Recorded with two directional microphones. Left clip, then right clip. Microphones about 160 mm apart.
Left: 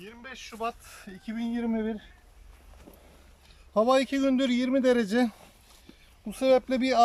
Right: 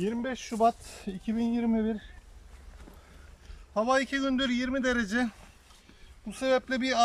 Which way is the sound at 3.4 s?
25° left (ahead or behind).